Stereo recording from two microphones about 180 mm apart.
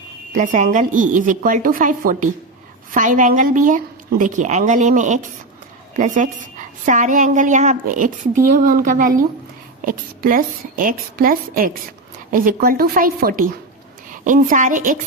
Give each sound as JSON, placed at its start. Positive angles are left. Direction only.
{"t": 0.3, "sound": "a woman's voice", "side_deg": -45}